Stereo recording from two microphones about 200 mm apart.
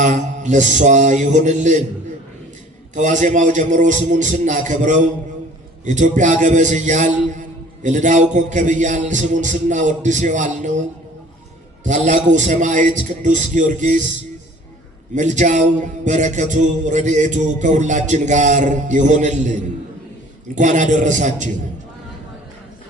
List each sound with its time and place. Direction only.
0.0 s a man's voice: 35° right (ahead or behind)
2.9 s a man's voice: 40° right (ahead or behind)
12.0 s a man's voice: 40° right (ahead or behind)
15.1 s a man's voice: 40° right (ahead or behind)
20.6 s a man's voice: 40° right (ahead or behind)